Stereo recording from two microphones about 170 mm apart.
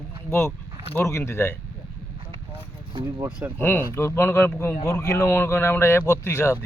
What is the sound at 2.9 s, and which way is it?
Speech, 15° right (ahead or behind).